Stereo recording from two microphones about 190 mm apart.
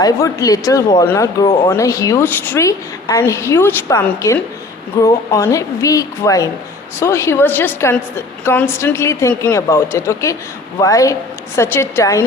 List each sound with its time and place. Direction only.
0.0 s a woman's voice: 20° left (ahead or behind)